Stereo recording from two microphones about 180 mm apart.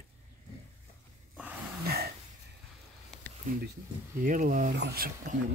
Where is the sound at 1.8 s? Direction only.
60° right (ahead or behind).